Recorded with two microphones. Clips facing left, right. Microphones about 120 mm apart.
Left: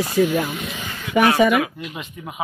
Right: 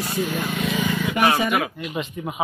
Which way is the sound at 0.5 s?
65° right (ahead or behind).